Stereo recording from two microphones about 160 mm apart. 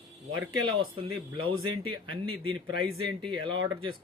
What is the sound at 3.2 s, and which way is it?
Speech, 30° right (ahead or behind).